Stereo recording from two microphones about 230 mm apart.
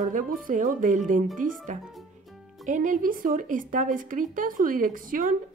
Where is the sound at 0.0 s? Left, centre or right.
Right.